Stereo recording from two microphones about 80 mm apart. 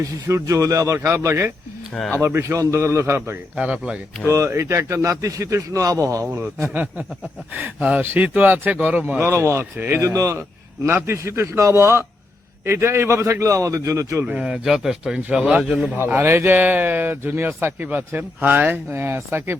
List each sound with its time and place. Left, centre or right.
0.3 s a man's voice: right
1.9 s speech: centre
2.2 s a man's voice: right
3.5 s speech: centre
4.3 s a man's voice: right
7.5 s a man's voice: right
9.2 s a man's voice: right
9.7 s a man's voice: right
10.2 s a man's voice: right
14.3 s speech: centre
16.0 s a man's voice: right